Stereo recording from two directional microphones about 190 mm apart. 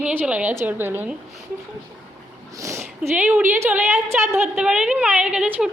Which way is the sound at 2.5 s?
15° right (ahead or behind).